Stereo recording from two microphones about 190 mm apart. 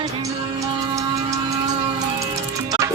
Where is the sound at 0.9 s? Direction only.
15° right (ahead or behind).